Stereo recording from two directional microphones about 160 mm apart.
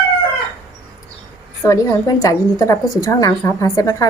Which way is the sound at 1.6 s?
20° left (ahead or behind).